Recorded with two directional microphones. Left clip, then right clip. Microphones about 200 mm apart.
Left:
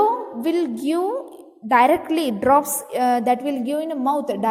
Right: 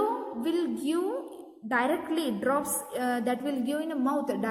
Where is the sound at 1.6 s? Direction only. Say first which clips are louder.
Left 12 dB; 35° left (ahead or behind).